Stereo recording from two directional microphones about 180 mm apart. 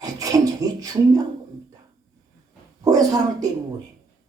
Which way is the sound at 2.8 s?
20° right (ahead or behind).